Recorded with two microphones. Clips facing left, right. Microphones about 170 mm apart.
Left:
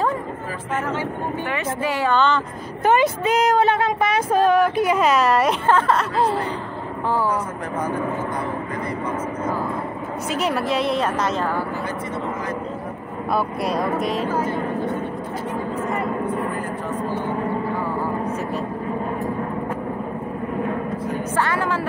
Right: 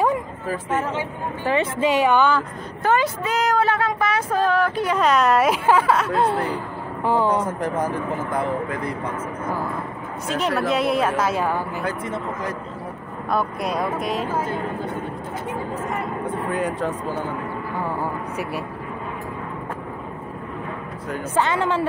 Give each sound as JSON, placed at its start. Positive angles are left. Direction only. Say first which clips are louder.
{"t": 1.4, "sound": "speech", "louder": "right 7 dB", "side_deg": -30}
{"t": 2.8, "sound": "speech", "louder": "left 3 dB", "side_deg": 20}
{"t": 7.1, "sound": "speech", "louder": "right 3 dB", "side_deg": -20}
{"t": 10.3, "sound": "speech", "louder": "right 1 dB", "side_deg": 5}
{"t": 13.3, "sound": "speech", "louder": "left 1 dB", "side_deg": 5}
{"t": 16.5, "sound": "speech", "louder": "right 4 dB", "side_deg": -90}
{"t": 21.4, "sound": "speech", "louder": "right 3 dB", "side_deg": -25}